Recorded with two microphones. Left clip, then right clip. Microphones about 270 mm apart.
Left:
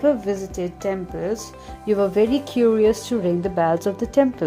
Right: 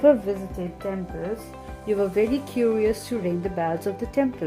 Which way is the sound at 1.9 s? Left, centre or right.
Centre.